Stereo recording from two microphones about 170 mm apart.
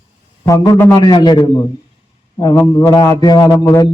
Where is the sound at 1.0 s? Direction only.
25° left (ahead or behind).